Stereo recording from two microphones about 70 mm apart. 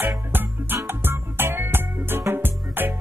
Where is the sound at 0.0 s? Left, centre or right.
Right.